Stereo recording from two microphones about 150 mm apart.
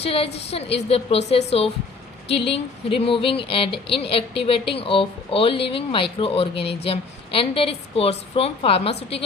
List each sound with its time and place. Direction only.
0.0 s speech: 40° left (ahead or behind)